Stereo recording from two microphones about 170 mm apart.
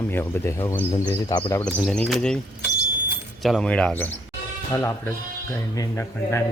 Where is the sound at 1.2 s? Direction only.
25° left (ahead or behind).